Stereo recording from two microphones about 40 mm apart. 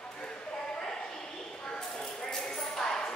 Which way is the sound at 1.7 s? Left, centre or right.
Left.